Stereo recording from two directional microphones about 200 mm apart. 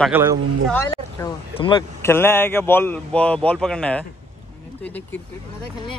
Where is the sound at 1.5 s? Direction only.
25° left (ahead or behind).